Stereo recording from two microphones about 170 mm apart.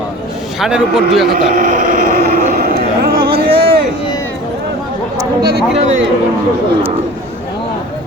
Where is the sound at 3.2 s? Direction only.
35° right (ahead or behind).